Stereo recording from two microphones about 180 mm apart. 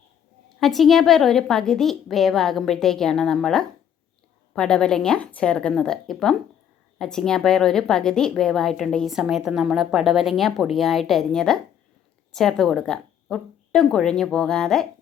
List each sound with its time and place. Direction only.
0.6 s a woman's voice: centre (ahead or behind)